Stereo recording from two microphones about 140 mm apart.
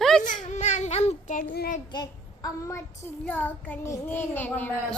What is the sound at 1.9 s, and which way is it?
Child singing, 25° left (ahead or behind).